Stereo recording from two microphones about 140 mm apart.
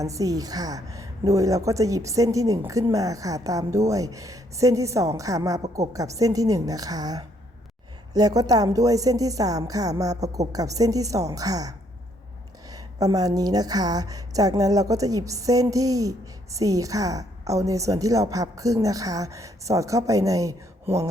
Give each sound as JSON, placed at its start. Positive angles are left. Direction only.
{"t": 0.0, "sound": "a woman's voice", "side_deg": -25}
{"t": 12.7, "sound": "a woman's voice", "side_deg": -25}